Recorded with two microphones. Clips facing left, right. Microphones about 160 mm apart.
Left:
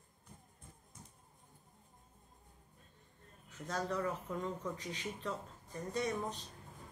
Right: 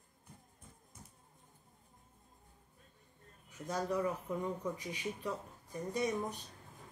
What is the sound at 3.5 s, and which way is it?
A woman's voice, 15° right (ahead or behind).